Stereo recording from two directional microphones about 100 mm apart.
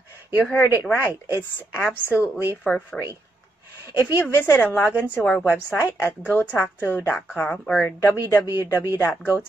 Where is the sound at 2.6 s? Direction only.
10° left (ahead or behind).